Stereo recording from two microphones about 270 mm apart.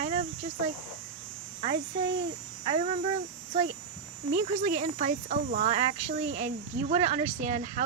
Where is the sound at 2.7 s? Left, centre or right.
Centre.